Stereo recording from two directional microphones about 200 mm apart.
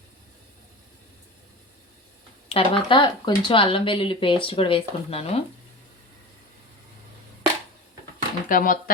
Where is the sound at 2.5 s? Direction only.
25° left (ahead or behind).